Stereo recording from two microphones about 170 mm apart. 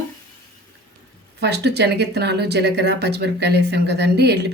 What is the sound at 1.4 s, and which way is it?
Speech, 80° right.